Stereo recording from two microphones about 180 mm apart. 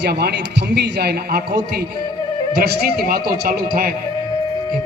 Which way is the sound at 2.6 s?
60° right (ahead or behind).